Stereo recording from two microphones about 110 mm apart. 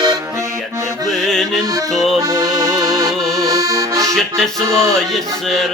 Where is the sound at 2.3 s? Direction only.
35° right (ahead or behind).